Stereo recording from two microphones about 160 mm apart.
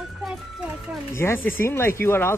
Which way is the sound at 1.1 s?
15° left (ahead or behind).